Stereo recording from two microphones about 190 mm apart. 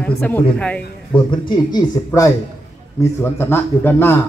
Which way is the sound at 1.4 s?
20° left (ahead or behind).